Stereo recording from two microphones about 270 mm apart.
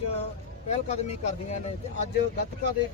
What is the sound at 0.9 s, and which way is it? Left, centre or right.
Speech, left.